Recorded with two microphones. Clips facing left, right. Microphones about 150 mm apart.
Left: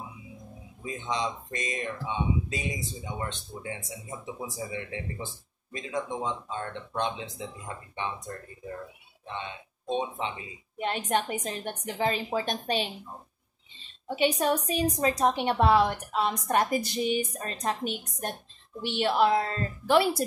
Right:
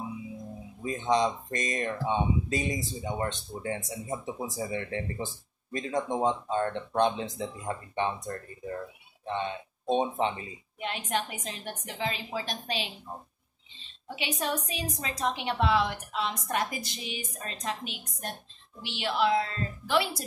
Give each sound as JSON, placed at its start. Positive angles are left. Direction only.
{"t": 0.8, "sound": "speech", "side_deg": -45}
{"t": 9.8, "sound": "speech", "side_deg": -40}
{"t": 10.8, "sound": "a woman's voice", "side_deg": 45}
{"t": 14.1, "sound": "a woman's voice", "side_deg": 45}